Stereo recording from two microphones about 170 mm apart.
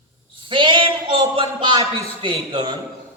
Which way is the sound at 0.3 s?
30° right (ahead or behind).